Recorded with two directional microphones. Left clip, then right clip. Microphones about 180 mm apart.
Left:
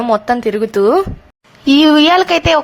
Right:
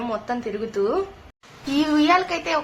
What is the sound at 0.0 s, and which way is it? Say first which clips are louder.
A woman's voice: left 13 dB; 50° left (ahead or behind).